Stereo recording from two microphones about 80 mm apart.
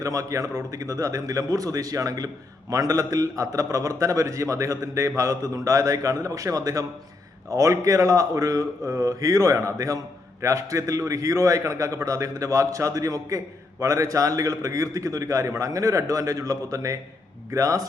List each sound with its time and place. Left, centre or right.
0.0 s a man's voice: right